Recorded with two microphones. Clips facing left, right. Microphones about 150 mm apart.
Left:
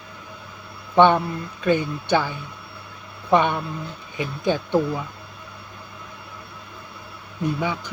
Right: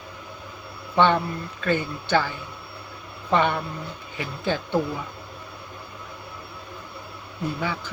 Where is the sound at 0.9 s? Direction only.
15° left (ahead or behind).